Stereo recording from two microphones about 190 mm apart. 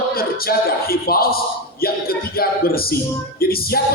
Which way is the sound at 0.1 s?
50° left (ahead or behind).